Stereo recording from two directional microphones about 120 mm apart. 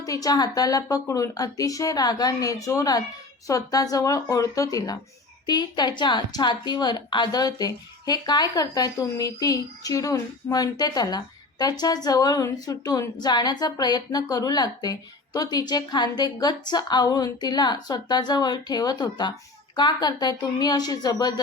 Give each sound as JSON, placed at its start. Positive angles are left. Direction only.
{"t": 0.0, "sound": "a woman's voice", "side_deg": 30}